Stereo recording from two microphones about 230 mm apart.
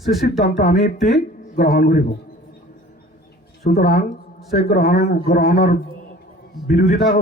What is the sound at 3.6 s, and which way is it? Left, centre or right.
A man's voice, left.